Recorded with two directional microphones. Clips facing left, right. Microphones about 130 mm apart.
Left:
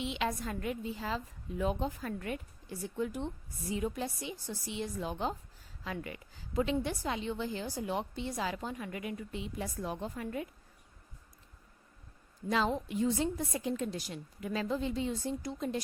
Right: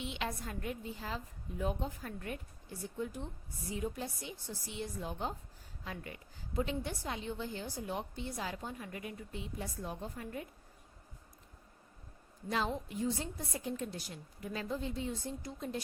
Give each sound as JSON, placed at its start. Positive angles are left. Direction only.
{"t": 0.0, "sound": "a woman's voice", "side_deg": 90}
{"t": 12.5, "sound": "a woman's voice", "side_deg": 90}